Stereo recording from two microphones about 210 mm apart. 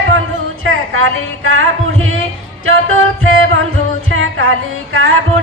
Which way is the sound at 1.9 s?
75° right (ahead or behind).